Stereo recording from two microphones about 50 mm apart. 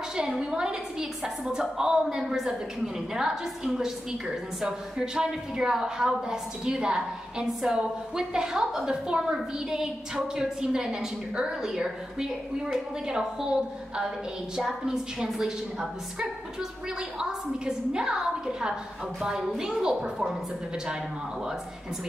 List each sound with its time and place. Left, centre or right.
0.4 s a woman's voice: centre